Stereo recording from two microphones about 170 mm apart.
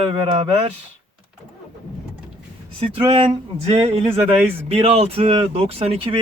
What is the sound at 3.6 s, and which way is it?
Speech, 35° right (ahead or behind).